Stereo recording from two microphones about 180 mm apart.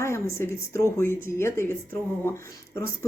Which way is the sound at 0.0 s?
15° left (ahead or behind).